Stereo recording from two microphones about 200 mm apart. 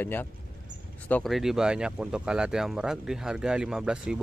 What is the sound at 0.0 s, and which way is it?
Speech, 10° left (ahead or behind).